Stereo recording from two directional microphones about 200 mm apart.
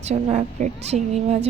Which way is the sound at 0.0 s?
35° right (ahead or behind).